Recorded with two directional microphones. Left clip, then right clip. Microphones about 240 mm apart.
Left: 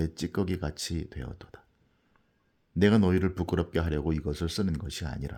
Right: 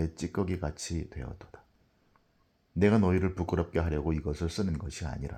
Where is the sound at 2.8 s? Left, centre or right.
Left.